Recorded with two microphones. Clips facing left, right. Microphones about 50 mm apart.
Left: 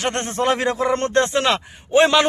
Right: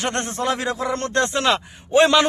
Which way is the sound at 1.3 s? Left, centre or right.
Centre.